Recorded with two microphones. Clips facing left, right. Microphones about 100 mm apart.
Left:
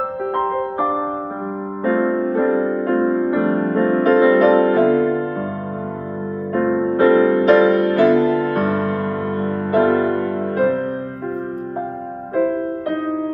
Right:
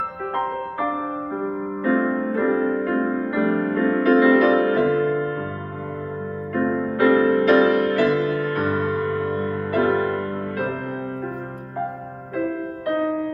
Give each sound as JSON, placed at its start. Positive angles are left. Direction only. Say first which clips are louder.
{"t": 0.3, "sound": "music", "louder": "left 5 dB", "side_deg": 30}
{"t": 6.5, "sound": "music", "louder": "left 5 dB", "side_deg": 30}
{"t": 12.4, "sound": "music", "louder": "left 7 dB", "side_deg": 35}